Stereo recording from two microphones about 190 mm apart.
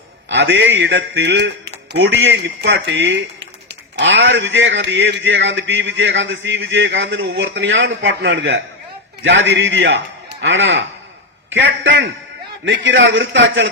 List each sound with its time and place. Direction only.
0.3 s speech: 70° right (ahead or behind)
12.6 s a man's voice: 80° right